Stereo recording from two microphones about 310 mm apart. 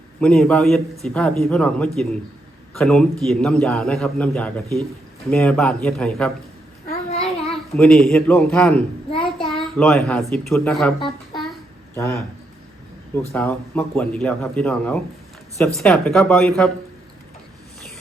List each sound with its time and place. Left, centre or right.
0.2 s speech: centre
6.8 s a sound: centre
7.8 s speech: centre
9.0 s child singing: centre
9.5 s speech: centre
11.0 s a sound: centre
11.9 s speech: centre
13.3 s speech: centre